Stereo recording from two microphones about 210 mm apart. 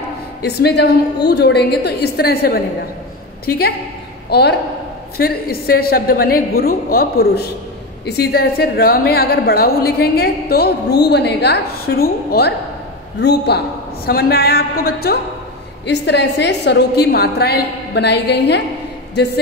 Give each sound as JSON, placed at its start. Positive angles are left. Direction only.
{"t": 0.4, "sound": "a woman's voice", "side_deg": 50}